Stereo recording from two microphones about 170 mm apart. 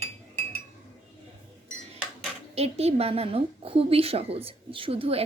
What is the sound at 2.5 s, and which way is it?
Speech, 35° right (ahead or behind).